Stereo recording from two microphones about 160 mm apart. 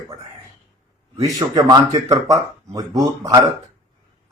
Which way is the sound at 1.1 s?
20° right (ahead or behind).